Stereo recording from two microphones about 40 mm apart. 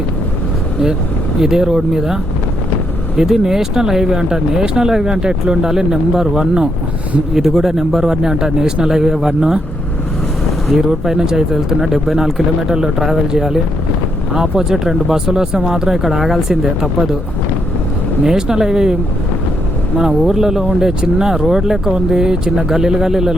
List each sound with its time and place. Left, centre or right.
1.4 s speech: centre
3.2 s speech: centre
10.8 s speech: centre
14.7 s speech: centre
18.3 s speech: centre
20.0 s speech: centre